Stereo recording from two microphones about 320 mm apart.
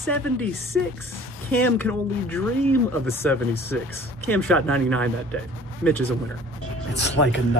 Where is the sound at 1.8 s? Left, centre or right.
Centre.